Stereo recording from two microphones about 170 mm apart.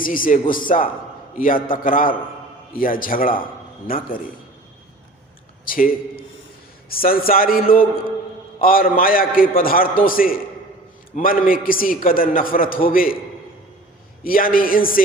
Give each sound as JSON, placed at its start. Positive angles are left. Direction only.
{"t": 0.0, "sound": "a man's voice", "side_deg": 55}
{"t": 5.6, "sound": "a man's voice", "side_deg": 55}
{"t": 14.3, "sound": "a man's voice", "side_deg": 55}